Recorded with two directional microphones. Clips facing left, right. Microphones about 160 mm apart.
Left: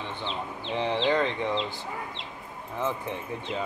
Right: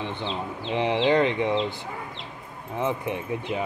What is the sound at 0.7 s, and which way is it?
Speech, 15° right (ahead or behind).